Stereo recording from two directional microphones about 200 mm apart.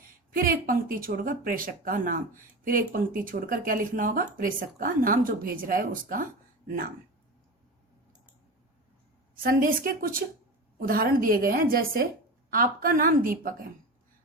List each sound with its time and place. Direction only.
0.3 s speech: 45° right (ahead or behind)
9.3 s speech: 45° right (ahead or behind)